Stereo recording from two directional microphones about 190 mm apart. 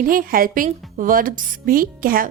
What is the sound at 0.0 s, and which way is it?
A woman's voice, 50° right (ahead or behind).